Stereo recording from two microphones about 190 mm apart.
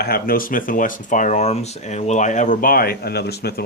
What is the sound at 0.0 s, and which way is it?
Speech, 50° left (ahead or behind).